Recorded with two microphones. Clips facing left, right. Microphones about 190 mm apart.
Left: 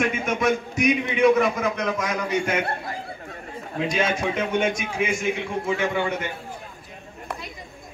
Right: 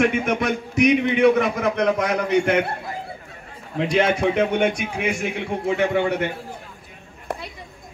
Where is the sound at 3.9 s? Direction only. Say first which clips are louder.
Right 6 dB; 65° right (ahead or behind).